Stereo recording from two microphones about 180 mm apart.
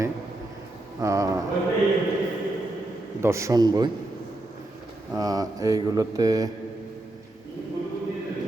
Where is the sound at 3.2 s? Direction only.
15° right (ahead or behind).